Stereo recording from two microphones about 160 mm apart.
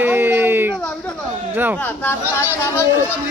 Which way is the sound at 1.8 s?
15° left (ahead or behind).